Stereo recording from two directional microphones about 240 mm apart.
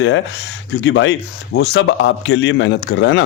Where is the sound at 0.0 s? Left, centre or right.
Left.